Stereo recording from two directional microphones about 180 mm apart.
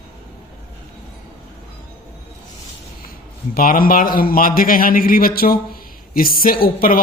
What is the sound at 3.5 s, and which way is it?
A man's voice, 55° left (ahead or behind).